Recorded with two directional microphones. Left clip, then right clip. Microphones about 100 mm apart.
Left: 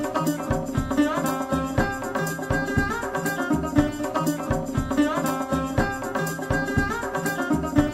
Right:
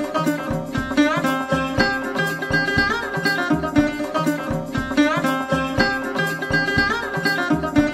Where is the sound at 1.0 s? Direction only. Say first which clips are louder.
Right 6 dB; 25° right (ahead or behind).